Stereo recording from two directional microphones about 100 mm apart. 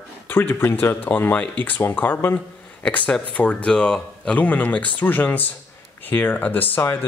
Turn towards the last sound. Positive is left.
turn(degrees=20)  # may be behind; listen again after turning